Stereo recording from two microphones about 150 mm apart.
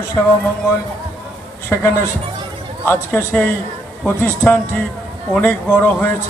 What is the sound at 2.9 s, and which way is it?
Speech, 15° left (ahead or behind).